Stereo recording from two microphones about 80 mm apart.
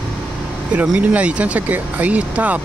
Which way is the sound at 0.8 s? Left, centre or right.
Centre.